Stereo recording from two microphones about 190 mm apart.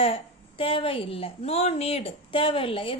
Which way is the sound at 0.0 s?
30° left (ahead or behind).